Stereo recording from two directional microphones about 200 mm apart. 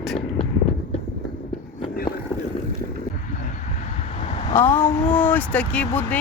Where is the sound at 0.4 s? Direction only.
25° left (ahead or behind).